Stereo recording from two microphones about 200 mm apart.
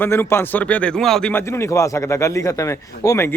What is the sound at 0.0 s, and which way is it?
A man's voice, 10° left (ahead or behind).